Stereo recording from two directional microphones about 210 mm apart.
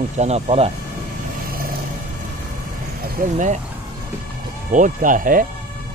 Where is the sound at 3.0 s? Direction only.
45° right (ahead or behind).